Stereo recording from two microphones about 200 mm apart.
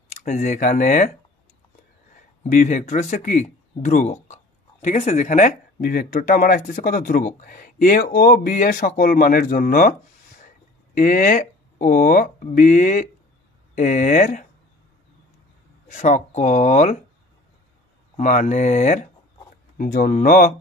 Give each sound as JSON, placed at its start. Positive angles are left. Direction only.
{"t": 0.1, "sound": "speech", "side_deg": 40}
{"t": 2.4, "sound": "speech", "side_deg": 40}
{"t": 11.0, "sound": "speech", "side_deg": 45}
{"t": 15.9, "sound": "speech", "side_deg": 35}
{"t": 18.1, "sound": "speech", "side_deg": 35}